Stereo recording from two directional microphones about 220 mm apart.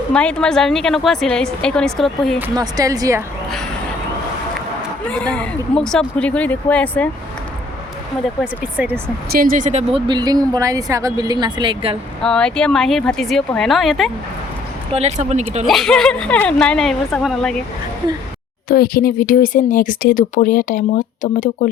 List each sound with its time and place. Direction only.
0.1 s a woman's voice: 5° left (ahead or behind)
2.6 s speech: 15° right (ahead or behind)
5.1 s a woman's voice: 5° left (ahead or behind)
8.4 s speech: 5° right (ahead or behind)
9.3 s speech: 40° right (ahead or behind); by 11.9 s 25° right (ahead or behind)
12.2 s a woman's voice: 5° left (ahead or behind)
14.9 s speech: 30° right (ahead or behind)
15.6 s a woman's voice: centre (ahead or behind)
18.7 s speech: 40° left (ahead or behind)